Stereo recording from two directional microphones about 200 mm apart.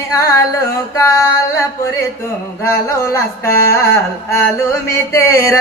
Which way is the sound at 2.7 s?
15° left (ahead or behind).